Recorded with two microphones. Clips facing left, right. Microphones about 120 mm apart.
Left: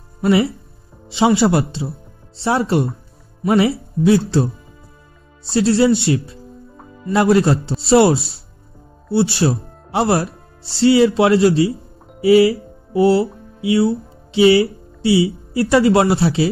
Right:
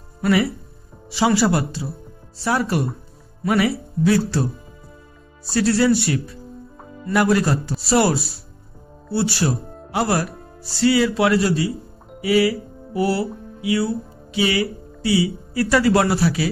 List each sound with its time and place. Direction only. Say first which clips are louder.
0.2 s speech: left 3 dB; 25° left (ahead or behind)